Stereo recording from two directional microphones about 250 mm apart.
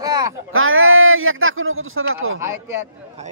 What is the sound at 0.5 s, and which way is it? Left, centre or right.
A man's voice, right.